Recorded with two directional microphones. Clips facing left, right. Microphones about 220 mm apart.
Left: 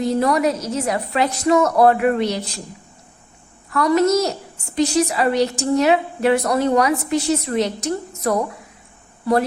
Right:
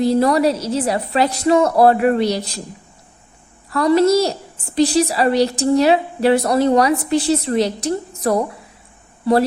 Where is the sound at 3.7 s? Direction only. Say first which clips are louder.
Right 3 dB; 30° right (ahead or behind).